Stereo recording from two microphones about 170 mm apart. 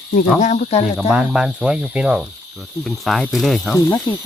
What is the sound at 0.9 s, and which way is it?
Speech, 5° right (ahead or behind).